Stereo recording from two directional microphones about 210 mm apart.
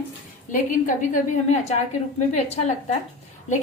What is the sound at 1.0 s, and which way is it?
A woman's voice, 35° left (ahead or behind).